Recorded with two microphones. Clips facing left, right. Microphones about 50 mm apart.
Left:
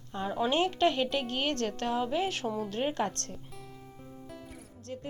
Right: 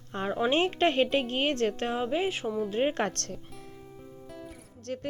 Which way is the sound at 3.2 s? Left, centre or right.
Right.